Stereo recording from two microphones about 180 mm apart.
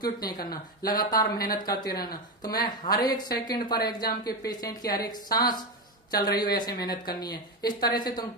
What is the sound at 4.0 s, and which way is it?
Speech, 55° left (ahead or behind).